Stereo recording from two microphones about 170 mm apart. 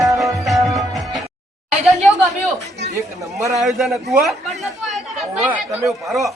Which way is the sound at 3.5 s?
Centre (ahead or behind).